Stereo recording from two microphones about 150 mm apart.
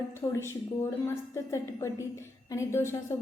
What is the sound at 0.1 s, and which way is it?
A woman's voice, 20° left (ahead or behind).